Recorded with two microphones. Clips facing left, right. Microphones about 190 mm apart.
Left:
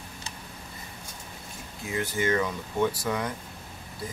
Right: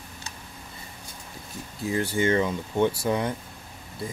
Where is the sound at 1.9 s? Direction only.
30° right (ahead or behind).